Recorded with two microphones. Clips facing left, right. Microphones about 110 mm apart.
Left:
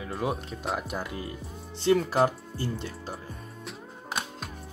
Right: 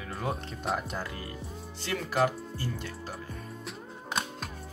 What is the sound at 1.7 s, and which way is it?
Speech, 30° left (ahead or behind).